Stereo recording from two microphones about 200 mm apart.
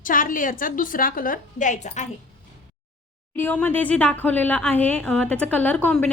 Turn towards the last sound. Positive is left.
turn(degrees=5)  # may be behind; listen again after turning